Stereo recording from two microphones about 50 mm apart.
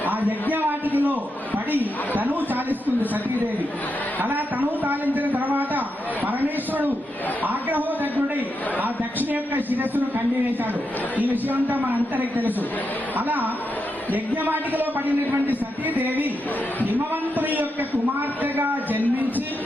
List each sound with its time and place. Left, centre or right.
0.0 s a sound: right
0.9 s a man's voice: right
4.2 s a man's voice: right
9.3 s a man's voice: right
11.2 s a man's voice: right
17.3 s a man's voice: right